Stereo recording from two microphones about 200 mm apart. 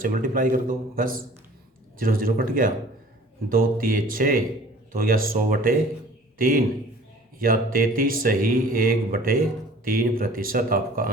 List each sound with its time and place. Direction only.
0.0 s speech: 45° right (ahead or behind)
7.3 s speech: 45° right (ahead or behind)